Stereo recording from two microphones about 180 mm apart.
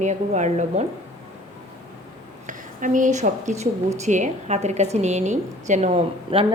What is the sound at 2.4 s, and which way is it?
A woman's voice, 45° right (ahead or behind).